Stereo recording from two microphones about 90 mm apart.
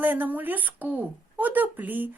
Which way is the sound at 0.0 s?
20° right (ahead or behind).